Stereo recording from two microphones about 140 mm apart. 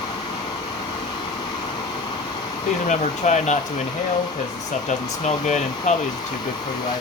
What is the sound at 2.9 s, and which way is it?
Speech, 60° left (ahead or behind).